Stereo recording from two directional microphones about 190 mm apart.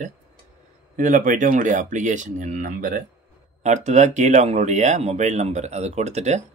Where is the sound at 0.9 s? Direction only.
45° right (ahead or behind).